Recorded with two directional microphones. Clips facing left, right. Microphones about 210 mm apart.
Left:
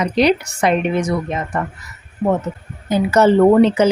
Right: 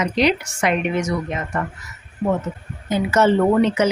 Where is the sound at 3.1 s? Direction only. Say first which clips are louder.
Left 5 dB; 40° left (ahead or behind).